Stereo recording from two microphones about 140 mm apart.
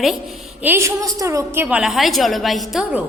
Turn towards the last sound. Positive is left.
turn(degrees=-5)  # may be behind; listen again after turning